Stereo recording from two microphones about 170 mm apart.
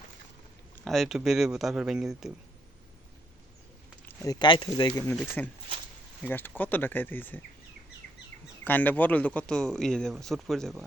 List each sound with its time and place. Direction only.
0.9 s speech: centre (ahead or behind)
4.2 s speech: 25° left (ahead or behind)
8.6 s speech: 10° left (ahead or behind)